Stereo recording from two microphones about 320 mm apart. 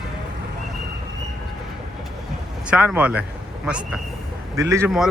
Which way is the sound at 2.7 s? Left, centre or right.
Centre.